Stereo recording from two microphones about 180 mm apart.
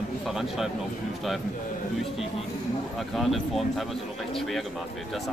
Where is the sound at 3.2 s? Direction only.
Centre (ahead or behind).